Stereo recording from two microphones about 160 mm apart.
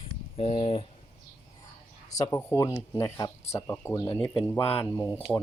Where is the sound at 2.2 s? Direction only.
15° left (ahead or behind).